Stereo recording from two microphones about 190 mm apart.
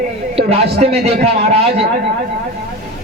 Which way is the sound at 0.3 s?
35° right (ahead or behind).